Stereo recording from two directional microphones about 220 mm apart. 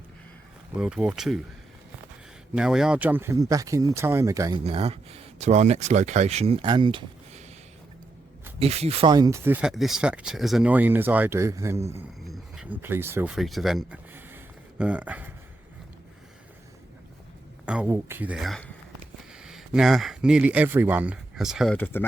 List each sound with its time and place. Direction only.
0.8 s speech: 5° right (ahead or behind)
2.6 s speech: 5° right (ahead or behind)
4.6 s speech: 25° right (ahead or behind)
8.5 s speech: 25° right (ahead or behind)
12.2 s a sound: centre (ahead or behind)
17.7 s speech: 5° right (ahead or behind)